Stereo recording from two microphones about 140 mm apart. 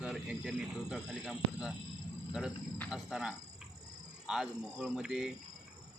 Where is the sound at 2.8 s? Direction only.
5° right (ahead or behind).